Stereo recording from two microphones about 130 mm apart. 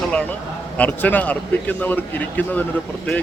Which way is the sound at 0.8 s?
10° left (ahead or behind).